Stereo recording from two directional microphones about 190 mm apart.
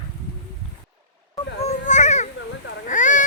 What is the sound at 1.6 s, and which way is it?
Baby cry, 40° left (ahead or behind).